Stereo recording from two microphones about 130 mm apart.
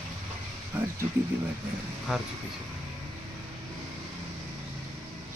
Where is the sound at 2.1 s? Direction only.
Centre (ahead or behind).